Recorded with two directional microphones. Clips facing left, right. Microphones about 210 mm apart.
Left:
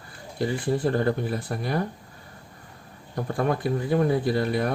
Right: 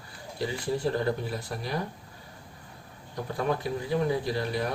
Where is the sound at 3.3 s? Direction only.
50° left (ahead or behind).